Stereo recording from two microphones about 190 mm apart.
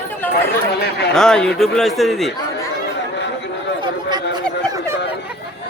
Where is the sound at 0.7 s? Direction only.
55° left (ahead or behind).